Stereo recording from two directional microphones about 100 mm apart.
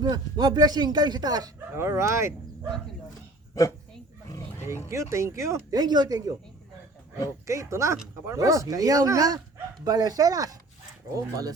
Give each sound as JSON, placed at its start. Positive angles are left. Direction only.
{"t": 0.0, "sound": "speech", "side_deg": -40}
{"t": 1.7, "sound": "speech", "side_deg": -25}
{"t": 4.3, "sound": "a sound", "side_deg": 25}
{"t": 4.9, "sound": "speech", "side_deg": -30}
{"t": 5.7, "sound": "speech", "side_deg": -45}
{"t": 7.4, "sound": "speech", "side_deg": -30}